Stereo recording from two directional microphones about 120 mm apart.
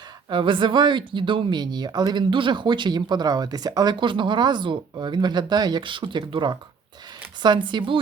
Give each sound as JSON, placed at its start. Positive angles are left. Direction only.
{"t": 0.3, "sound": "speech", "side_deg": -45}